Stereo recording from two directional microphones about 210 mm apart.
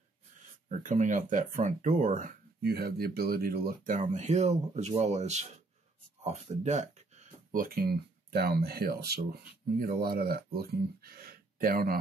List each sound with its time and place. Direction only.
0.7 s speech: 35° right (ahead or behind)